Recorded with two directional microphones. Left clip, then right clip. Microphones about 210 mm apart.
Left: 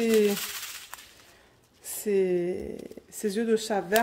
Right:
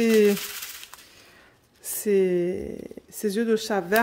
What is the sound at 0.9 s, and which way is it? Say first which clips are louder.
Gunshot: left 2 dB; 10° left (ahead or behind).